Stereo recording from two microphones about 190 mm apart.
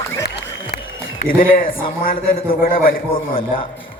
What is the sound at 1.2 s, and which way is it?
A man's voice, 50° left (ahead or behind).